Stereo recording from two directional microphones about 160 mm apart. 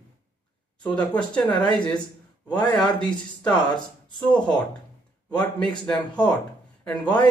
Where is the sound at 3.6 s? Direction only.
25° left (ahead or behind).